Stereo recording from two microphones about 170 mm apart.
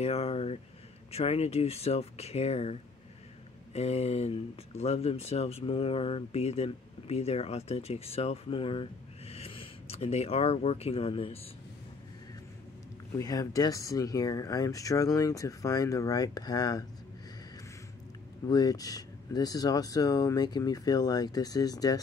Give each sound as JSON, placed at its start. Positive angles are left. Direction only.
{"t": 0.0, "sound": "speech", "side_deg": 35}
{"t": 13.2, "sound": "speech", "side_deg": 20}
{"t": 18.5, "sound": "speech", "side_deg": 20}